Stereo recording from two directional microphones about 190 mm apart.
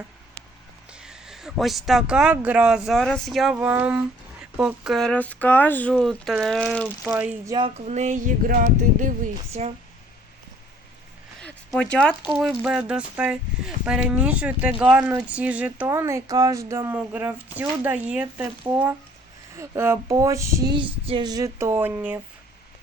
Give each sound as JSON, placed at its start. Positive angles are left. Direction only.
{"t": 0.9, "sound": "speech", "side_deg": -5}
{"t": 7.0, "sound": "speech", "side_deg": -10}
{"t": 7.9, "sound": "speech", "side_deg": -40}
{"t": 11.4, "sound": "a sound", "side_deg": 5}
{"t": 12.2, "sound": "speech", "side_deg": -5}